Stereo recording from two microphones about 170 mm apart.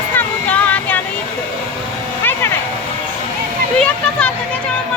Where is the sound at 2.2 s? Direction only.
15° left (ahead or behind).